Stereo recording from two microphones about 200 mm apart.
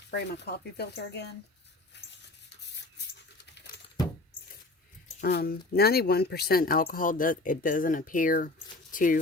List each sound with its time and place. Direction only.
0.1 s speech: 60° left (ahead or behind)
5.2 s speech: 50° left (ahead or behind)